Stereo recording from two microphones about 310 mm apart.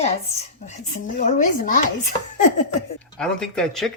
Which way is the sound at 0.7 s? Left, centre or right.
Left.